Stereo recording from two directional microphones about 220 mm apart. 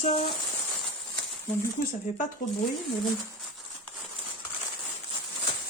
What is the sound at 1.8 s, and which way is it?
Speech, 35° left (ahead or behind).